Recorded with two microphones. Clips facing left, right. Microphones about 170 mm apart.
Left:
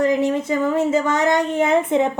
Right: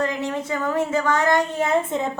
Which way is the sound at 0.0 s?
20° left (ahead or behind).